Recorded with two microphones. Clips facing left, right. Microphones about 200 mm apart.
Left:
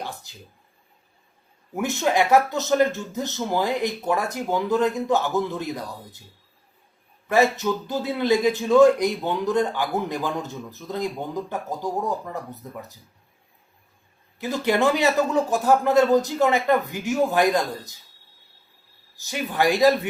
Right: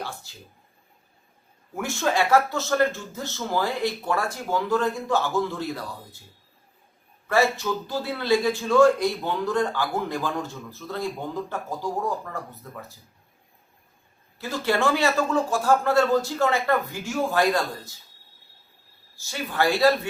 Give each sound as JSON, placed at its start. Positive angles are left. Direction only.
{"t": 0.0, "sound": "speech", "side_deg": 15}
{"t": 1.7, "sound": "a man's voice", "side_deg": 20}
{"t": 7.3, "sound": "a man's voice", "side_deg": 20}
{"t": 14.3, "sound": "a man's voice", "side_deg": 20}
{"t": 19.2, "sound": "a man's voice", "side_deg": 15}